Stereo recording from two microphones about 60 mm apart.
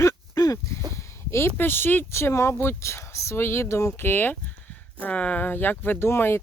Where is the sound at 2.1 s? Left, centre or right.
Left.